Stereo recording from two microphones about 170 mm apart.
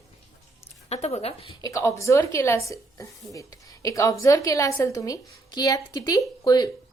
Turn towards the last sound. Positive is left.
turn(degrees=25)  # may be behind; listen again after turning